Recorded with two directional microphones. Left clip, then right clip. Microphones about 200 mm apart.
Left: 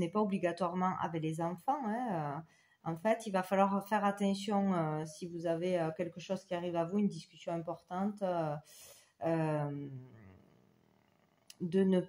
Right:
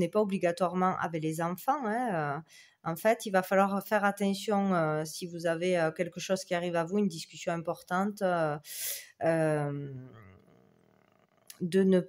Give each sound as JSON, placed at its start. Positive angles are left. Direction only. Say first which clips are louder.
{"t": 0.0, "sound": "speech", "louder": "right 6 dB", "side_deg": -50}
{"t": 11.4, "sound": "speech", "louder": "right 5 dB", "side_deg": -45}